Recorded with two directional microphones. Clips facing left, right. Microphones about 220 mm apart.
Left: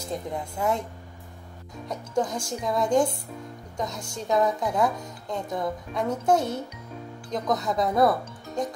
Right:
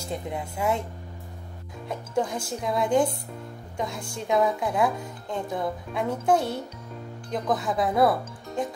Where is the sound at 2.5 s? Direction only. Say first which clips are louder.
Even; 5° right (ahead or behind).